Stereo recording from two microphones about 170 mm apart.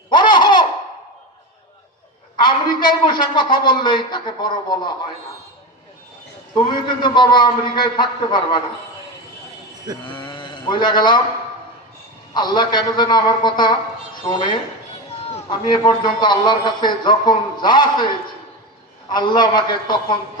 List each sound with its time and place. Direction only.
0.1 s a sound: 30° left (ahead or behind)
2.3 s a man's voice: 30° left (ahead or behind)
7.0 s a man's voice: 25° left (ahead or behind)
10.1 s speech: 25° left (ahead or behind)
12.3 s a man's voice: 25° left (ahead or behind)
19.1 s a man's voice: 25° left (ahead or behind)